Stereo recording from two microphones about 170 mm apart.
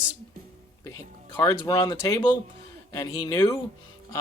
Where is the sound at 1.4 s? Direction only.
20° left (ahead or behind).